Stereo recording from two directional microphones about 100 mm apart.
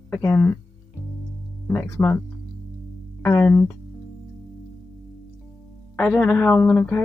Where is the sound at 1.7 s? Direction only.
25° left (ahead or behind).